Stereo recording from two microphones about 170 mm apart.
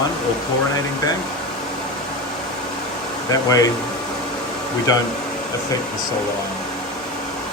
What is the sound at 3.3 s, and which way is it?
Speech, 20° left (ahead or behind).